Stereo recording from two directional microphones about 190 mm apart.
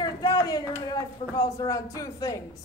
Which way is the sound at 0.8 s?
20° left (ahead or behind).